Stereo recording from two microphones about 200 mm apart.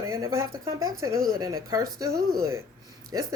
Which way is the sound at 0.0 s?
15° right (ahead or behind).